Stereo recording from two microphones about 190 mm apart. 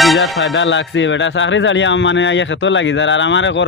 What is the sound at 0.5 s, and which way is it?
Speech, 75° left (ahead or behind).